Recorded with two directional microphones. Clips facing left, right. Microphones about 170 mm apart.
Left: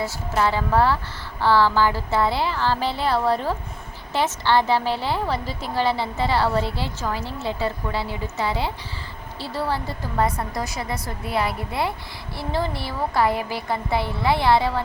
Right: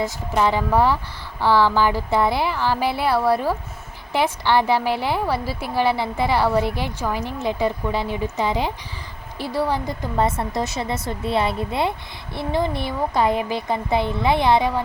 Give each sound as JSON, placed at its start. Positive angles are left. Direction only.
{"t": 0.0, "sound": "a woman's voice", "side_deg": -15}